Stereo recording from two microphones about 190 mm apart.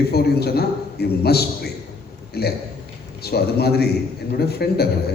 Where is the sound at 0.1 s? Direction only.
55° left (ahead or behind).